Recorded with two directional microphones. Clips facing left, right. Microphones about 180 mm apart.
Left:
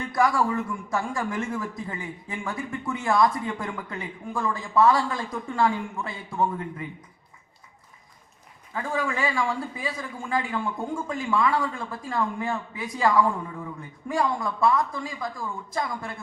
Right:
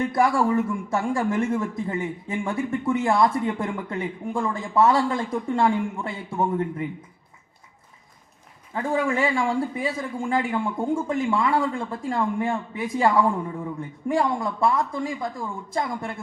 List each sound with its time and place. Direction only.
0.0 s a man's voice: 25° right (ahead or behind)
8.7 s a man's voice: 30° right (ahead or behind)